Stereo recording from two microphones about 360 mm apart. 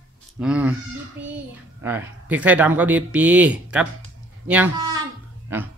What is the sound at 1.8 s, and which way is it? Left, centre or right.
A woman's voice, centre.